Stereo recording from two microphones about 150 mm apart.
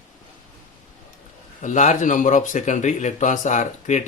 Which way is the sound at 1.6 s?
55° left (ahead or behind).